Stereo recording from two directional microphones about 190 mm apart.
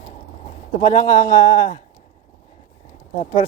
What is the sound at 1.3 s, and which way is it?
Speech, 20° left (ahead or behind).